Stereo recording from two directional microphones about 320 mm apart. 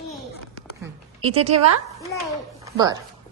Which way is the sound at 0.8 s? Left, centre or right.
Centre.